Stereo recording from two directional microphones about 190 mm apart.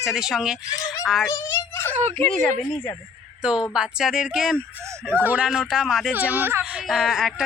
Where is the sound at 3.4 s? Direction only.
5° right (ahead or behind).